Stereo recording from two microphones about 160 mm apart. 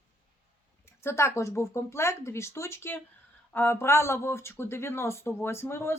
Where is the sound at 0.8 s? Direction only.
15° left (ahead or behind).